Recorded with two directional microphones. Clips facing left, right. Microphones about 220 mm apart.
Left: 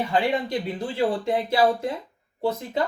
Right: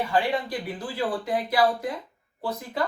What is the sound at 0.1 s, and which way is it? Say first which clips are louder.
Speech: left 3 dB; 25° left (ahead or behind).